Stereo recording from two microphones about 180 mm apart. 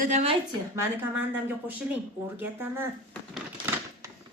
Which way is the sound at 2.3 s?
10° right (ahead or behind).